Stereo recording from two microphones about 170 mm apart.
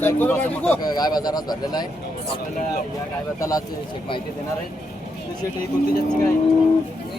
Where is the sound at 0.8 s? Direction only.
25° left (ahead or behind).